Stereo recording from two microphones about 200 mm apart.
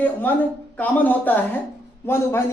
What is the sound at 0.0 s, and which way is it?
Speech, 10° left (ahead or behind).